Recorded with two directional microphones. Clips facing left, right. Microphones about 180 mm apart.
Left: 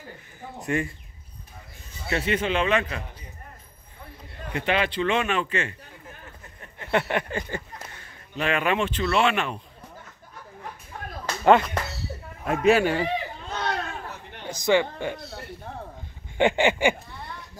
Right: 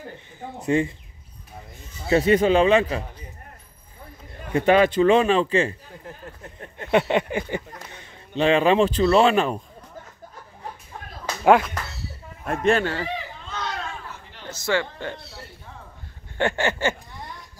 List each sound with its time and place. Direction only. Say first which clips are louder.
0.7 s speech: right 6 dB; 25° right (ahead or behind)
2.0 s a man's voice: right 8 dB; 35° right (ahead or behind)
4.6 s a man's voice: right 8 dB; 45° right (ahead or behind)
6.8 s speech: right 5 dB; 20° right (ahead or behind); by 9.6 s 35° right (ahead or behind)
11.4 s speech: right 1 dB; 5° right (ahead or behind); by 13.1 s 15° left (ahead or behind)
13.5 s a sound: left 2 dB; 55° left (ahead or behind)
14.4 s speech: left 3 dB; 15° left (ahead or behind)
15.2 s a sound: left 5 dB; 60° left (ahead or behind)
16.3 s speech: left 3 dB; 15° left (ahead or behind)